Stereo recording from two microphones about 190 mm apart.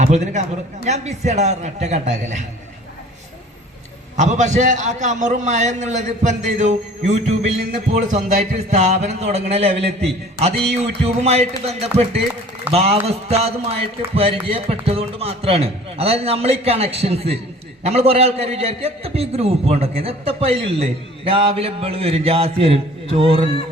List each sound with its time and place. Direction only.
0.0 s a man's voice: 40° right (ahead or behind)
4.2 s a man's voice: 40° right (ahead or behind)